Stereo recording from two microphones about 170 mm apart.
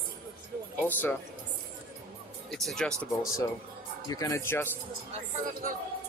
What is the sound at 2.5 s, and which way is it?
Speech, centre (ahead or behind).